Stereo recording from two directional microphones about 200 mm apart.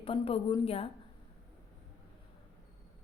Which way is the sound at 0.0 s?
25° left (ahead or behind).